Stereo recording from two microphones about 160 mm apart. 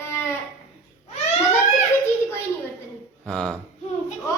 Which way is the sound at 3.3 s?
5° left (ahead or behind).